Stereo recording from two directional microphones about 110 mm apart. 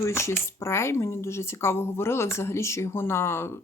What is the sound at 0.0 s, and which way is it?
Speech, 25° left (ahead or behind).